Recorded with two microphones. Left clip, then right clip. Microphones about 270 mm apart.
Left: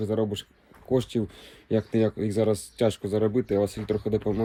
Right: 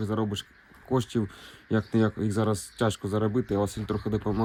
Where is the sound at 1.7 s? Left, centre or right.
Centre.